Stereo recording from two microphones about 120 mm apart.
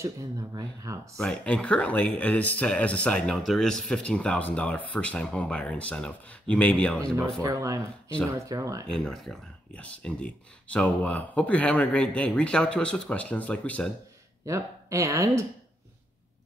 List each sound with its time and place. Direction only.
0.0 s speech: 25° right (ahead or behind)
1.1 s speech: 5° left (ahead or behind)
7.4 s speech: 25° right (ahead or behind)
8.8 s speech: 5° left (ahead or behind)
14.4 s speech: 25° right (ahead or behind)